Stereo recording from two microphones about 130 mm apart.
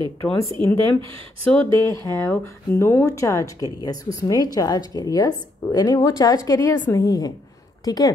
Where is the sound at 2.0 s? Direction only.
20° left (ahead or behind).